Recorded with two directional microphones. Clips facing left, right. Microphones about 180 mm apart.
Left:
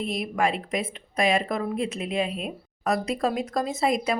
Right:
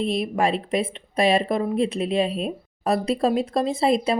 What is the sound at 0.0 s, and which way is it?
A woman's voice, 25° right (ahead or behind).